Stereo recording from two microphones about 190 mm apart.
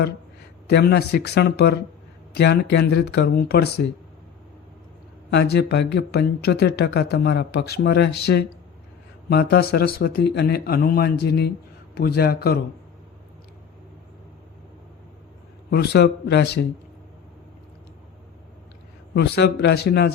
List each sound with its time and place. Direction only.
0.7 s speech: 55° left (ahead or behind)
5.3 s speech: 60° left (ahead or behind)
15.7 s speech: 60° left (ahead or behind)
19.1 s speech: 60° left (ahead or behind)